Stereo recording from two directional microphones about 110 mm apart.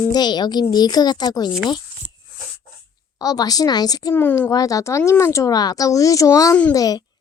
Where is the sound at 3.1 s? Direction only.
35° left (ahead or behind).